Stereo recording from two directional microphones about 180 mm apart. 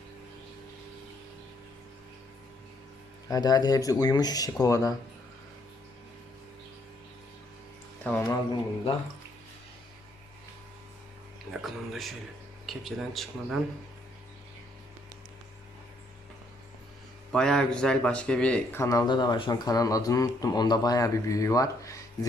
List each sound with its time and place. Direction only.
3.2 s speech: 20° left (ahead or behind)
8.0 s speech: 10° left (ahead or behind)
11.6 s speech: centre (ahead or behind)
17.3 s speech: 5° left (ahead or behind)